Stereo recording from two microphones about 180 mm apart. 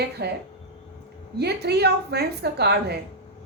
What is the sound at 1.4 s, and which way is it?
A woman's voice, 65° right (ahead or behind).